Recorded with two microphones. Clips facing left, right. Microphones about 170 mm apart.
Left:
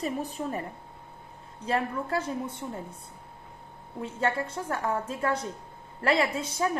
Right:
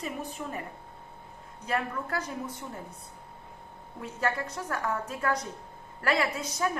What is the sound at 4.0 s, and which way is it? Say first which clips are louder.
A woman's voice: left 2 dB; 25° left (ahead or behind).